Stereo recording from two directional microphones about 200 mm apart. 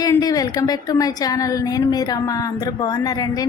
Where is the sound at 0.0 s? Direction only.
20° left (ahead or behind).